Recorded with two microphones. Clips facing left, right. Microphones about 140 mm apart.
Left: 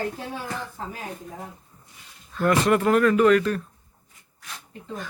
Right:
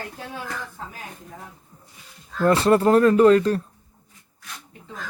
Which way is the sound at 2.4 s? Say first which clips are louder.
Right 3 dB; 30° right (ahead or behind).